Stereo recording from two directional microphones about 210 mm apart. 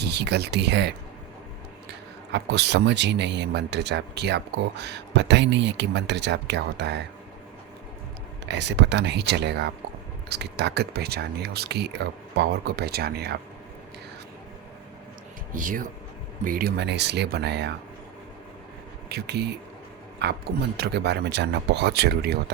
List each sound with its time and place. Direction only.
0.0 s speech: 50° right (ahead or behind)
2.3 s speech: 55° right (ahead or behind)
8.4 s speech: 55° right (ahead or behind)
15.5 s speech: 40° right (ahead or behind)
19.0 s speech: 50° right (ahead or behind)